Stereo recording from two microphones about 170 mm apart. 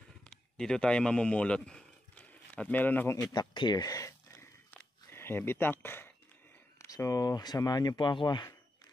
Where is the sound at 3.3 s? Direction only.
25° left (ahead or behind).